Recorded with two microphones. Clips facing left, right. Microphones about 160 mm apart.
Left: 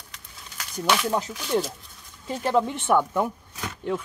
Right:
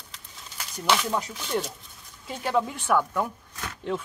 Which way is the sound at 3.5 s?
10° left (ahead or behind).